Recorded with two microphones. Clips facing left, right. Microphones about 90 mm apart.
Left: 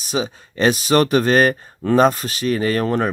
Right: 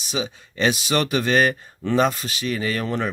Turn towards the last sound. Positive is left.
turn(degrees=45)  # may be behind; listen again after turning